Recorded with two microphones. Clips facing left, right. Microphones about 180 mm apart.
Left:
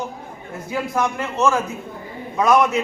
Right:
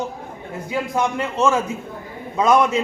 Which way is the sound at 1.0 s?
20° right (ahead or behind).